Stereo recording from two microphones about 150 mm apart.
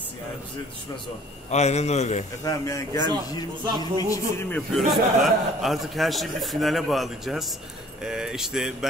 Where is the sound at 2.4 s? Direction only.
20° left (ahead or behind).